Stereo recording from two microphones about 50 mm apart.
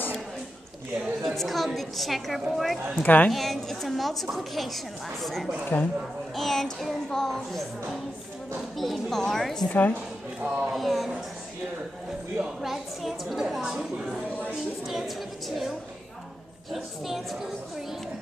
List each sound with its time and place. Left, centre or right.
1.2 s a woman's voice: centre
3.0 s a woman's voice: left
3.3 s a woman's voice: centre
5.7 s speech: left
6.3 s child singing: centre
8.7 s a woman's voice: centre
9.2 s child singing: centre
9.7 s a woman's voice: left
10.4 s speech: right
10.7 s a woman's voice: centre
12.6 s a woman's voice: centre
14.9 s a woman's voice: centre
16.7 s a woman's voice: centre